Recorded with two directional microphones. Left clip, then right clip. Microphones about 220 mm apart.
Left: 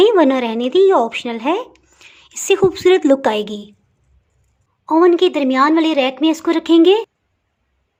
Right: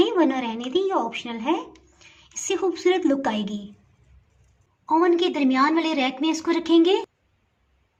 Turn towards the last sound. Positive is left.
turn(degrees=35)  # may be behind; listen again after turning